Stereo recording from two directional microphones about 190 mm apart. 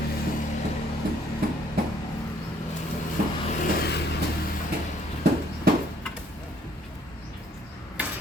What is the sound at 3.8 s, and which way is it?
Vehicle, 60° left (ahead or behind).